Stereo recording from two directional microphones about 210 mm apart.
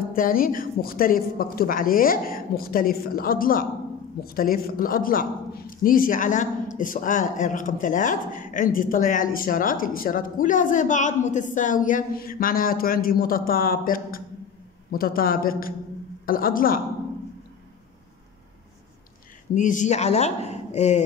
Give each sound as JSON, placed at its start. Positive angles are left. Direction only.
{"t": 0.1, "sound": "a woman's voice", "side_deg": 40}
{"t": 19.5, "sound": "a woman's voice", "side_deg": 35}